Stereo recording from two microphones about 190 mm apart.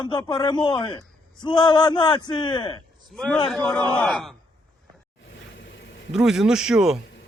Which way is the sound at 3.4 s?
5° left (ahead or behind).